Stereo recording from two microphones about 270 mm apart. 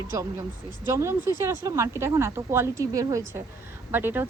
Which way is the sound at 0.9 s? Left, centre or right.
Centre.